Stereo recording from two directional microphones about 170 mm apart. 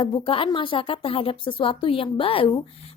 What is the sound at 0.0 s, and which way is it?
Speech, 30° left (ahead or behind).